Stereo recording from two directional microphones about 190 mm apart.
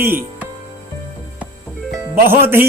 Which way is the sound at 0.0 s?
10° right (ahead or behind).